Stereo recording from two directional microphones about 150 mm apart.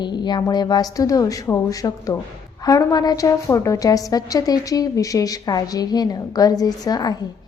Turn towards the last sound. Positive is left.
turn(degrees=25)  # may be behind; listen again after turning